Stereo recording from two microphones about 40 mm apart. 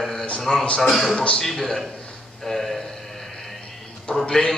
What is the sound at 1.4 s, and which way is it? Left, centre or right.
A man's voice, centre.